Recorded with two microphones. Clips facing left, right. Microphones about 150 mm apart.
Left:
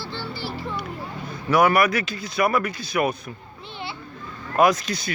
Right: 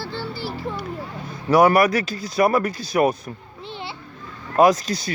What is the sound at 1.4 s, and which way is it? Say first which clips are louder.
Speech: right 3 dB; 35° right (ahead or behind).